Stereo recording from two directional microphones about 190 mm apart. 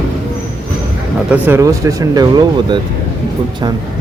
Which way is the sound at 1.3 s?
15° right (ahead or behind).